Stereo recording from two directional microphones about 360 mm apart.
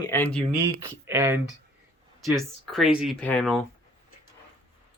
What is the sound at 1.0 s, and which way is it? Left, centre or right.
Speech, centre.